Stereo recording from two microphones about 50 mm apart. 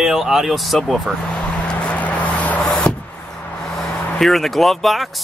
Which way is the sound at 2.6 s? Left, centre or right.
Centre.